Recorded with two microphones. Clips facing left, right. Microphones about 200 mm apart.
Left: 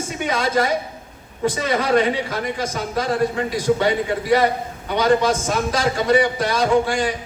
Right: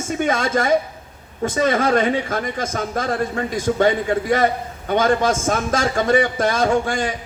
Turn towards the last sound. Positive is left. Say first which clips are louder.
# left 1 dB
turn(degrees=-45)  # may be behind; listen again after turning